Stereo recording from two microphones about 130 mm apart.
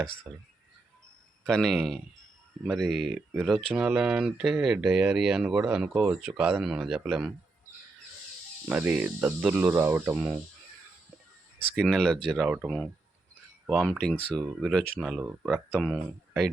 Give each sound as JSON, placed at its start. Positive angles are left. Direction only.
{"t": 0.3, "sound": "speech", "side_deg": 0}
{"t": 1.5, "sound": "speech", "side_deg": 5}
{"t": 8.6, "sound": "speech", "side_deg": -10}
{"t": 11.8, "sound": "speech", "side_deg": 5}
{"t": 14.9, "sound": "speech", "side_deg": -5}